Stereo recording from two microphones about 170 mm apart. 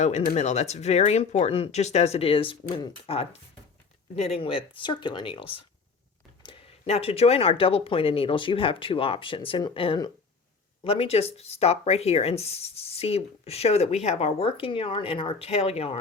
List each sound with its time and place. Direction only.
0.0 s speech: 45° left (ahead or behind)